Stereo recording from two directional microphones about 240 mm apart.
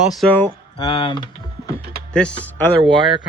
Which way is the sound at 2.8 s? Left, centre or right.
Centre.